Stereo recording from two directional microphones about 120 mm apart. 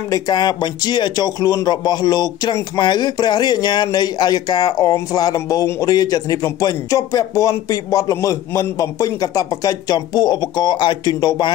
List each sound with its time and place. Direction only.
0.1 s speech: 35° left (ahead or behind)